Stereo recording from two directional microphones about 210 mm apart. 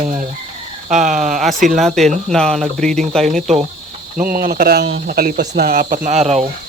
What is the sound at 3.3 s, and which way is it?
Speech, 35° right (ahead or behind).